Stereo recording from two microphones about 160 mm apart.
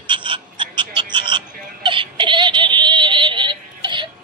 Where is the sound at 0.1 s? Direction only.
30° right (ahead or behind).